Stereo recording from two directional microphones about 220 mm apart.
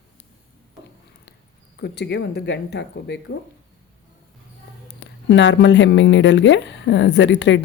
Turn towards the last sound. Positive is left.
turn(degrees=55)  # may be behind; listen again after turning